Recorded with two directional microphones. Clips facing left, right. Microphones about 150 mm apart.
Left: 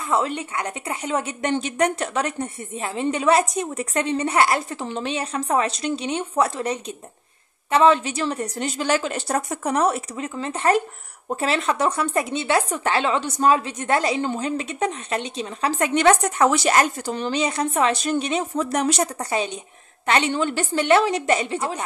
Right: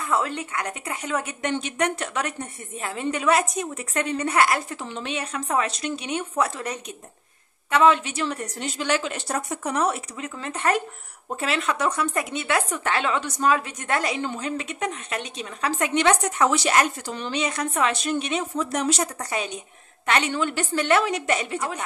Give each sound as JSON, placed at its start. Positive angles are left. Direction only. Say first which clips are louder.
{"t": 0.1, "sound": "a woman's voice", "louder": "left 3 dB", "side_deg": 25}